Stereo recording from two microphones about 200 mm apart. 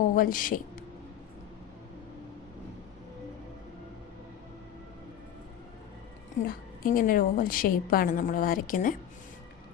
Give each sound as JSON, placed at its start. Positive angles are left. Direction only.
{"t": 0.0, "sound": "speech", "side_deg": 45}
{"t": 6.5, "sound": "a woman's voice", "side_deg": 45}